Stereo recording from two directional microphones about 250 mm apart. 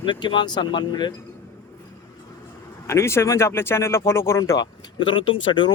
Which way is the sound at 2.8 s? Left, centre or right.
Centre.